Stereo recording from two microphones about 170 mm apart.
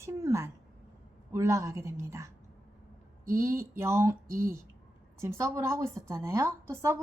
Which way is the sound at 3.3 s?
15° right (ahead or behind).